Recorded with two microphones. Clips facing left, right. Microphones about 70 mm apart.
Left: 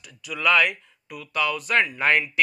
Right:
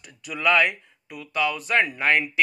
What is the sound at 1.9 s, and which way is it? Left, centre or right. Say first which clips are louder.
Speech: even; centre.